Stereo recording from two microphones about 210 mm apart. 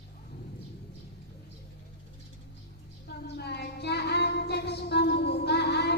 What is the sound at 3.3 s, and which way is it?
Child singing, 50° left (ahead or behind).